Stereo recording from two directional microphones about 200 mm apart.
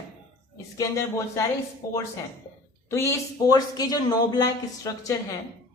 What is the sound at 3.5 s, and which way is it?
Speech, 20° left (ahead or behind).